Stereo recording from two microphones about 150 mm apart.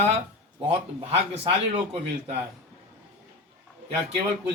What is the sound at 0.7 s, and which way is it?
A man's voice, 45° right (ahead or behind).